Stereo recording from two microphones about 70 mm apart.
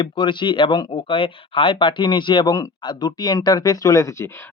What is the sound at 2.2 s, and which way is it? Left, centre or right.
Speech, left.